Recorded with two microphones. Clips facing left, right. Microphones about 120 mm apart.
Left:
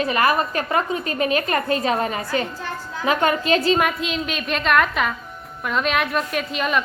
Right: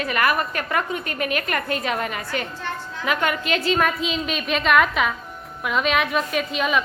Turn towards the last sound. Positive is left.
turn(degrees=0)  # may be behind; listen again after turning